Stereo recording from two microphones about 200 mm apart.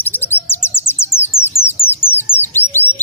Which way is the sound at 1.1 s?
10° left (ahead or behind).